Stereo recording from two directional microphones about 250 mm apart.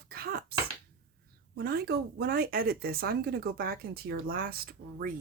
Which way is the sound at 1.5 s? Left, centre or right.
Right.